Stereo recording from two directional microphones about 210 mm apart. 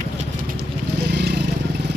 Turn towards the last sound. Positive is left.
turn(degrees=-55)  # may be behind; listen again after turning